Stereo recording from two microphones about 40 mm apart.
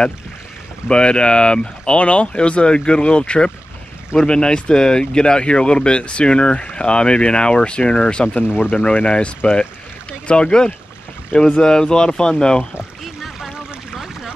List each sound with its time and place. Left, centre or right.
0.8 s speech: left
13.0 s pour: centre
13.9 s boat: centre